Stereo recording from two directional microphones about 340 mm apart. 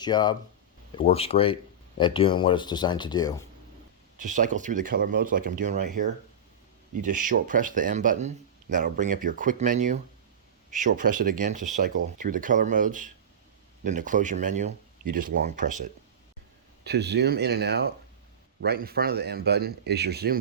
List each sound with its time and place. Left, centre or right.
0.0 s speech: centre
4.2 s speech: right